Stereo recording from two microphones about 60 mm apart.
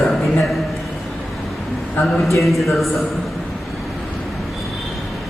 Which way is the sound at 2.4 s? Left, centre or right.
Centre.